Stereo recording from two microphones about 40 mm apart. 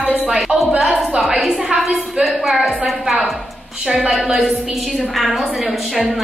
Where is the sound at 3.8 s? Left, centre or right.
Right.